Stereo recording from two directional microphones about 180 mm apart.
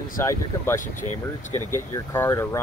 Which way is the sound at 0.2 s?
15° left (ahead or behind).